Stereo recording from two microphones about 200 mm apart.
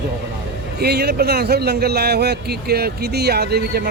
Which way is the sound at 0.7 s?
55° right (ahead or behind).